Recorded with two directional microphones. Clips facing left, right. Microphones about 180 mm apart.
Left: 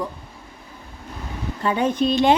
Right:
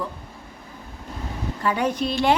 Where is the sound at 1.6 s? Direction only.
25° left (ahead or behind).